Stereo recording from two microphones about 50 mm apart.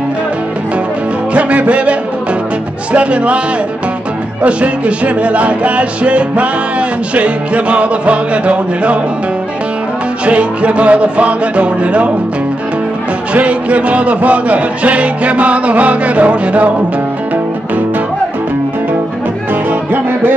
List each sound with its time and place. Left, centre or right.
1.3 s music: right
2.9 s a man's voice: right
4.4 s a man's voice: right
10.2 s a man's voice: right
13.3 s a man's voice: right
19.7 s music: right